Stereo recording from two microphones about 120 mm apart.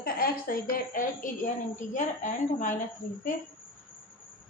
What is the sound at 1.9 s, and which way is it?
Speech, 90° left.